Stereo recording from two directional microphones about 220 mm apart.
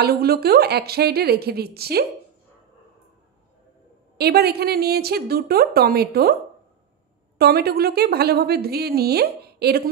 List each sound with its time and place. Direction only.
0.0 s a woman's voice: 45° right (ahead or behind)
4.2 s a woman's voice: 45° right (ahead or behind)
7.3 s a woman's voice: 45° right (ahead or behind)